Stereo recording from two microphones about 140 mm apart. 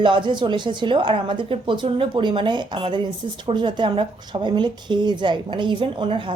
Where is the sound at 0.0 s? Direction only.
35° right (ahead or behind).